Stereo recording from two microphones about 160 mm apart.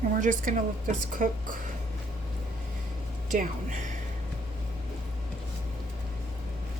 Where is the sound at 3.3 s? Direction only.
55° right (ahead or behind).